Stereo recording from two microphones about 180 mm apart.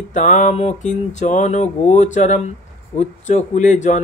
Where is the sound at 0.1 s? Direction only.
45° left (ahead or behind).